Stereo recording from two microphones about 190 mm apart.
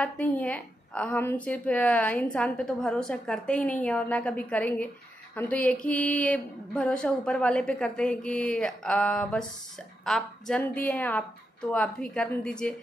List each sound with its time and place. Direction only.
0.0 s a woman's voice: 10° left (ahead or behind)